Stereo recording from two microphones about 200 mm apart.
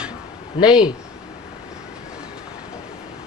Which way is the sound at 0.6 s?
20° left (ahead or behind).